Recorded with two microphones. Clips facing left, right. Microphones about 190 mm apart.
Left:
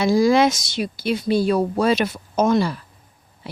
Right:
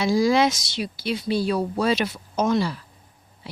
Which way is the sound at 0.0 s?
50° left (ahead or behind).